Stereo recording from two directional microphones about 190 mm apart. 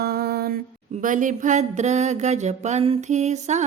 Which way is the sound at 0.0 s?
55° right (ahead or behind).